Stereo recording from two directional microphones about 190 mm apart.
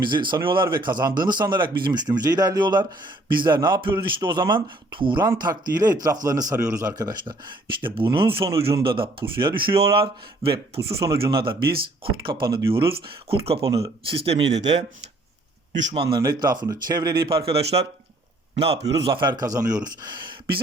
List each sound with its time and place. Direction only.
0.0 s a man's voice: 25° right (ahead or behind)
11.6 s speech: 55° right (ahead or behind)
12.2 s speech: 25° right (ahead or behind)
15.7 s speech: 40° right (ahead or behind)
16.1 s speech: 20° right (ahead or behind)
18.6 s speech: 30° right (ahead or behind)